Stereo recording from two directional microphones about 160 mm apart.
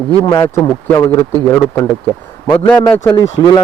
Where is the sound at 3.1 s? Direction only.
30° left (ahead or behind).